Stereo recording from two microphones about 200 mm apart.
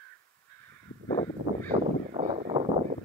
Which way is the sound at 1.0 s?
20° left (ahead or behind).